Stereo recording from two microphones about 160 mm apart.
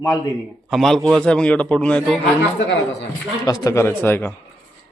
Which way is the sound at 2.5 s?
90° left.